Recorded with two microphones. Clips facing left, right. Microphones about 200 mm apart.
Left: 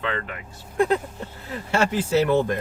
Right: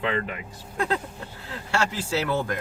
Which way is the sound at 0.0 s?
15° right (ahead or behind).